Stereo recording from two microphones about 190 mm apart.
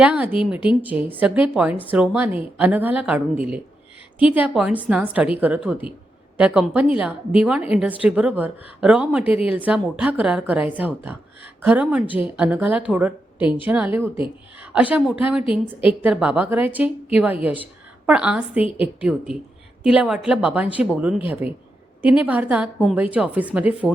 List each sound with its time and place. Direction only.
0.0 s a woman's voice: 10° right (ahead or behind)
9.2 s a woman's voice: 30° left (ahead or behind)
9.5 s a woman's voice: 10° right (ahead or behind)
18.0 s a woman's voice: 5° right (ahead or behind)